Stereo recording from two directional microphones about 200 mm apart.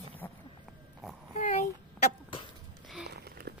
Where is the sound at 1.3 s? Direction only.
40° left (ahead or behind).